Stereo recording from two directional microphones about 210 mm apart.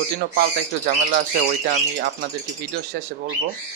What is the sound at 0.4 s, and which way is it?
Speech, 45° right (ahead or behind).